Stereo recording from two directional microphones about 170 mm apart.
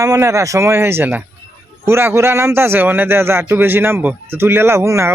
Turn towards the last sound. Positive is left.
turn(degrees=-15)  # may be behind; listen again after turning